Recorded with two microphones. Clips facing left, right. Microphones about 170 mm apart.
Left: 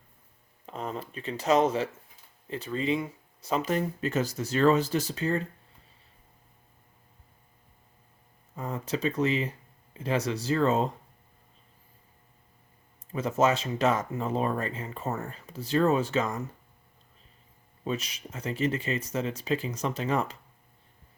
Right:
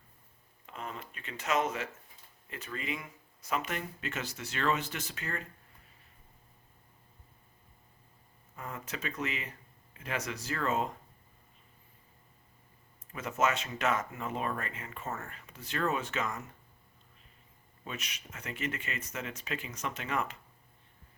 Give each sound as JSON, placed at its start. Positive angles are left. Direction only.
{"t": 0.6, "sound": "speech", "side_deg": 35}
{"t": 8.5, "sound": "speech", "side_deg": 30}
{"t": 13.1, "sound": "speech", "side_deg": 30}
{"t": 17.8, "sound": "speech", "side_deg": 35}